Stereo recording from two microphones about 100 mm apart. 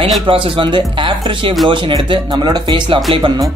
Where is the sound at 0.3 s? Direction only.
65° right (ahead or behind).